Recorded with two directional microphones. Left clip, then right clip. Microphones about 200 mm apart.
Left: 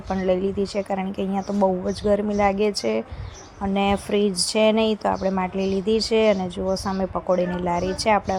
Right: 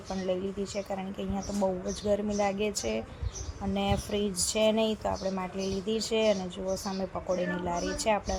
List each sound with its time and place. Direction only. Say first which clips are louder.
0.1 s speech: left 10 dB; 25° left (ahead or behind)